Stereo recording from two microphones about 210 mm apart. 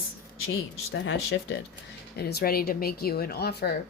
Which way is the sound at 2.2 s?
50° left (ahead or behind).